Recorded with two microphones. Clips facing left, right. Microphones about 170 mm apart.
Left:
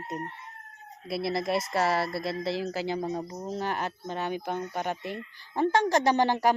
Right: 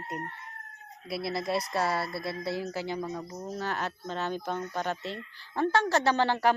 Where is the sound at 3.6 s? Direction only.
15° left (ahead or behind).